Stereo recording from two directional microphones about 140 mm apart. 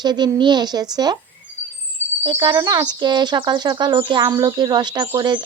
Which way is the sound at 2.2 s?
35° right (ahead or behind).